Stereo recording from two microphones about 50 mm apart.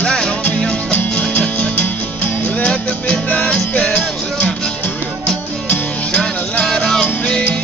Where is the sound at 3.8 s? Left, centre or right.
Centre.